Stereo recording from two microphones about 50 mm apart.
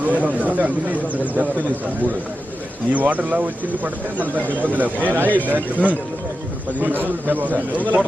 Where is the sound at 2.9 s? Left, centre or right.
Right.